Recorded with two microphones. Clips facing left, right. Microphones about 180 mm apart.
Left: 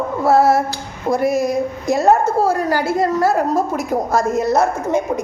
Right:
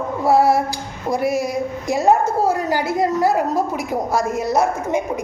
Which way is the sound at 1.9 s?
15° right (ahead or behind).